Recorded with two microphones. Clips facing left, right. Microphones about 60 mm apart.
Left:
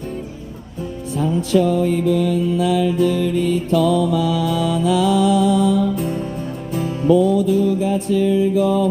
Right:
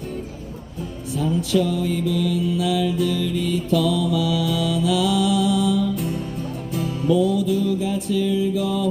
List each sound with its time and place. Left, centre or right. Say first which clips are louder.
1.1 s mantra: left 3 dB; left
6.7 s music: left 5 dB; left